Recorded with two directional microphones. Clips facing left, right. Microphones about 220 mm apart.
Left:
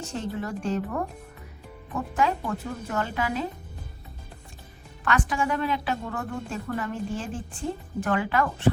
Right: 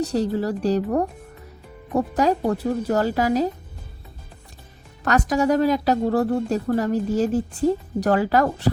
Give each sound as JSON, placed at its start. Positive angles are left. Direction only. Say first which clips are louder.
{"t": 0.0, "sound": "a woman's voice", "louder": "right 9 dB", "side_deg": -35}
{"t": 5.0, "sound": "a woman's voice", "louder": "right 7 dB", "side_deg": -40}